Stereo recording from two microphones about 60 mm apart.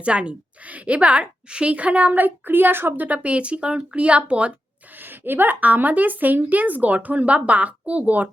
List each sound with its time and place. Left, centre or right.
0.0 s a woman's voice: centre
4.9 s a woman's voice: right